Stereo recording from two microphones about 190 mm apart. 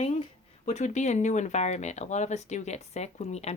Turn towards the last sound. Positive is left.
turn(degrees=35)  # may be behind; listen again after turning